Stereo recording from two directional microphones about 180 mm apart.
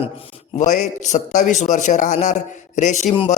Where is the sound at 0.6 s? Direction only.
40° left (ahead or behind).